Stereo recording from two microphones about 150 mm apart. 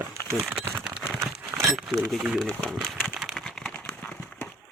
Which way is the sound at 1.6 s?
Centre (ahead or behind).